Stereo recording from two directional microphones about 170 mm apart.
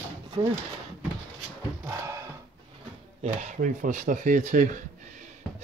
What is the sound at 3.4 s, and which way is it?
Speech, 50° right (ahead or behind).